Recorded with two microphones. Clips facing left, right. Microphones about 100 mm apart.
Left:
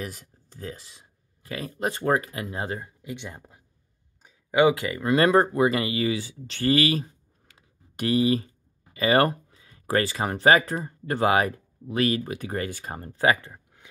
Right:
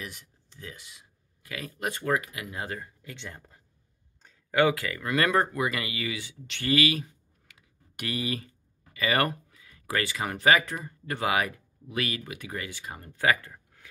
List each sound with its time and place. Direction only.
0.0 s speech: 40° left (ahead or behind); by 13.8 s 20° left (ahead or behind)